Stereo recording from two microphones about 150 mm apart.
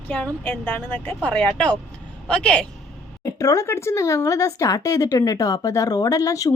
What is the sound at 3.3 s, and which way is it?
Speech, 20° left (ahead or behind).